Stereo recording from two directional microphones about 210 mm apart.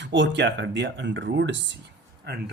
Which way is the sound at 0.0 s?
60° right (ahead or behind).